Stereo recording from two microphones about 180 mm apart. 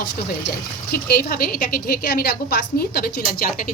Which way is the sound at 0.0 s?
55° left (ahead or behind).